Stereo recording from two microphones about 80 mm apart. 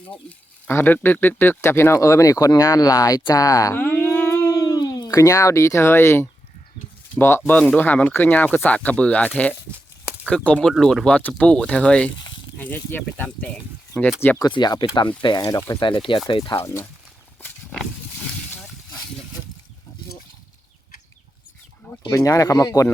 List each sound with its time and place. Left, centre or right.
0.3 s speech: left
3.8 s a sound: left
4.6 s speech: left
7.5 s speech: centre
7.8 s speech: left
14.5 s speech: left
15.4 s speech: left
16.0 s speech: left
16.6 s speech: left
22.1 s speech: left